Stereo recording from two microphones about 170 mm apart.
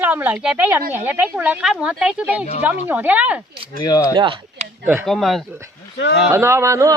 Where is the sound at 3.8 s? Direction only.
20° left (ahead or behind).